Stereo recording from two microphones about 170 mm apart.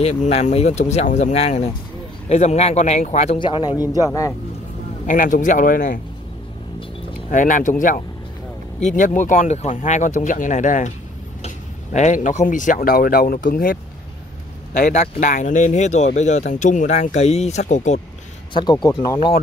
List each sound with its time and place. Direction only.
0.0 s speech: 40° left (ahead or behind)
3.3 s speech: 30° left (ahead or behind)
5.0 s speech: 50° left (ahead or behind)
7.2 s speech: 50° left (ahead or behind)
14.7 s speech: 45° left (ahead or behind)
18.5 s speech: 25° left (ahead or behind)